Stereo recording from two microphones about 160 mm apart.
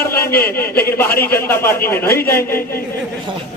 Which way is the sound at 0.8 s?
15° left (ahead or behind).